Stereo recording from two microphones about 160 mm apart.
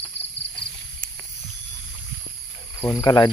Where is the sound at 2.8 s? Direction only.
20° left (ahead or behind).